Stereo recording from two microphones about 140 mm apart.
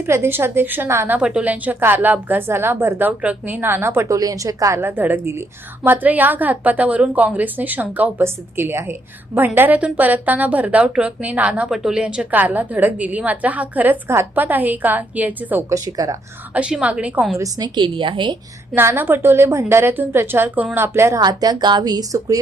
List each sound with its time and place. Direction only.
0.0 s a woman's voice: 15° right (ahead or behind)
15.7 s speech: 25° right (ahead or behind)
16.6 s a woman's voice: 10° right (ahead or behind)
17.3 s a woman's voice: 25° right (ahead or behind)
18.7 s a woman's voice: 15° right (ahead or behind)